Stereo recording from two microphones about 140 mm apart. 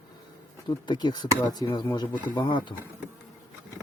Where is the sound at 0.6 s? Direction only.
30° left (ahead or behind).